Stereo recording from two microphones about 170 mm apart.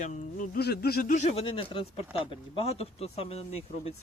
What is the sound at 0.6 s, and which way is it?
Speech, 70° left (ahead or behind).